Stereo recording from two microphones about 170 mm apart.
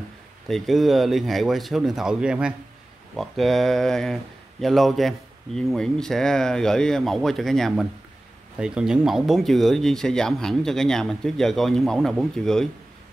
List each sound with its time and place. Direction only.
0.5 s speech: centre (ahead or behind)